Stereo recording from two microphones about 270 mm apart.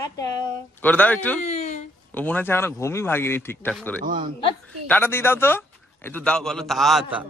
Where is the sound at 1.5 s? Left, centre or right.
Left.